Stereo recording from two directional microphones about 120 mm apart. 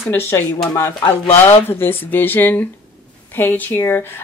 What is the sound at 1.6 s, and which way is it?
Speech, 20° left (ahead or behind).